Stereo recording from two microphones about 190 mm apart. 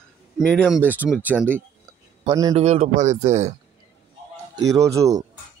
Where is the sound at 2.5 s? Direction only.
35° right (ahead or behind).